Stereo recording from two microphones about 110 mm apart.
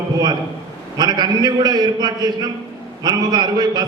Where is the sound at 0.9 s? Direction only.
40° right (ahead or behind).